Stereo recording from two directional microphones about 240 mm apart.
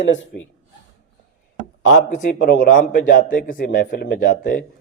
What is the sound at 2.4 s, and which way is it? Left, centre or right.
Speech, left.